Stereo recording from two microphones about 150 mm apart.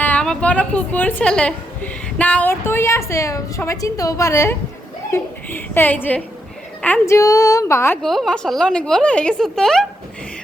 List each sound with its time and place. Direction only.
0.0 s a woman's voice: 10° left (ahead or behind)
8.0 s a woman's voice: centre (ahead or behind)